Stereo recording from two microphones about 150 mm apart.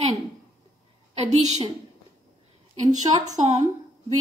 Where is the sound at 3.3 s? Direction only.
50° right (ahead or behind).